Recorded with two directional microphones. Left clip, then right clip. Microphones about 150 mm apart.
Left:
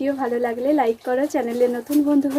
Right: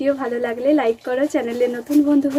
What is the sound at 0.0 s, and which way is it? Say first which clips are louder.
Speech: right 1 dB; centre (ahead or behind).